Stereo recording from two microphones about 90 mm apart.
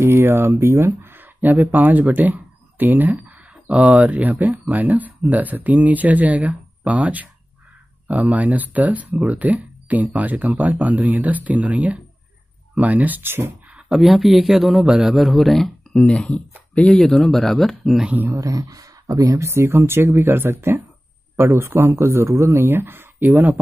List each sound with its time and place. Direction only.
0.0 s speech: 25° right (ahead or behind)
13.7 s a man's voice: 5° right (ahead or behind)
18.3 s speech: 40° right (ahead or behind); by 23.5 s 25° right (ahead or behind)